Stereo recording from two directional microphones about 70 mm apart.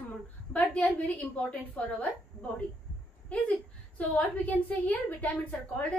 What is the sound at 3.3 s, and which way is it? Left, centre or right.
A woman's voice, centre.